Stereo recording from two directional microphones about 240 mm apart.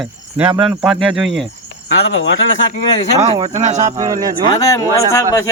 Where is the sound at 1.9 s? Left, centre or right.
Left.